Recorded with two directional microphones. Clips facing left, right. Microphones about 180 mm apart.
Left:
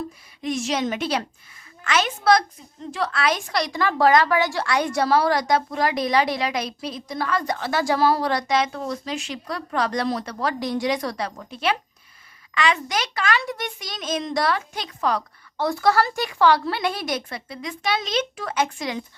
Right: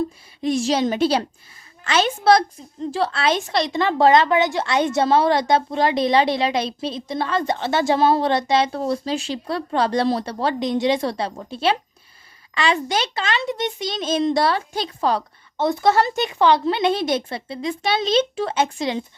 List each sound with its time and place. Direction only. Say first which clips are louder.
0.4 s a woman's voice: right 5 dB; 30° right (ahead or behind)